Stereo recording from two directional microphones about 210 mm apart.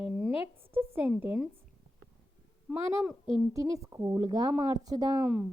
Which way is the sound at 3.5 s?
15° right (ahead or behind).